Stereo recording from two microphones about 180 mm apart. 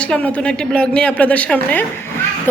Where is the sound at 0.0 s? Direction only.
5° left (ahead or behind).